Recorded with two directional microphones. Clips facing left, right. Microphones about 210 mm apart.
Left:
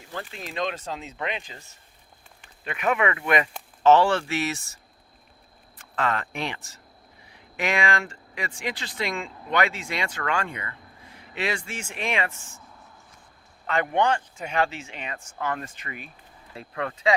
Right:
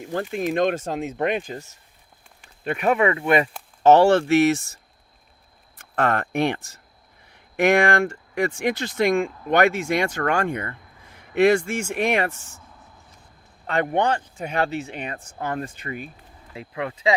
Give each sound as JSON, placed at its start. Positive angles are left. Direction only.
{"t": 0.0, "sound": "speech", "side_deg": -50}
{"t": 2.6, "sound": "speech", "side_deg": -35}
{"t": 3.8, "sound": "speech", "side_deg": -45}
{"t": 6.0, "sound": "speech", "side_deg": -55}
{"t": 14.0, "sound": "speech", "side_deg": -35}
{"t": 14.9, "sound": "speech", "side_deg": -50}
{"t": 15.4, "sound": "speech", "side_deg": -35}
{"t": 16.6, "sound": "speech", "side_deg": -15}